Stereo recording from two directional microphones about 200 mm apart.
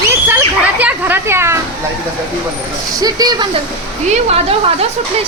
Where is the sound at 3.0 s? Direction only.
20° right (ahead or behind).